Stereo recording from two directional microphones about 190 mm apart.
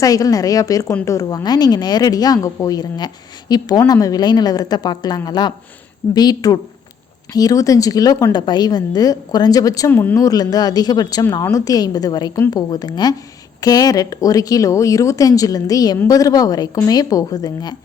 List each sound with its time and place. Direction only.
0.0 s speech: 20° left (ahead or behind)